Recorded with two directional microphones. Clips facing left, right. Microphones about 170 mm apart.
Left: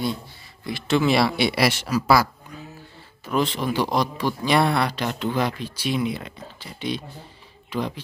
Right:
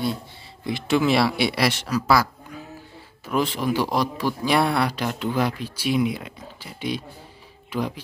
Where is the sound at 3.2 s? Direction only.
5° right (ahead or behind).